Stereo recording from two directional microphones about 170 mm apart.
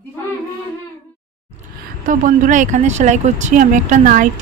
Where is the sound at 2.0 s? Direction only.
50° right (ahead or behind).